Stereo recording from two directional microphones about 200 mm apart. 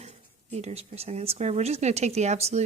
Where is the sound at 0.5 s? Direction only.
30° right (ahead or behind).